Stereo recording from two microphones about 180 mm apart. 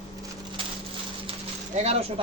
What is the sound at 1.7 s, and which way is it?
Speech, 35° right (ahead or behind).